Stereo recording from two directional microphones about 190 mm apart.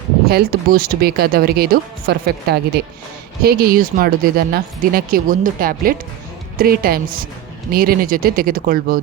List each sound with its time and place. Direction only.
0.3 s speech: 50° right (ahead or behind)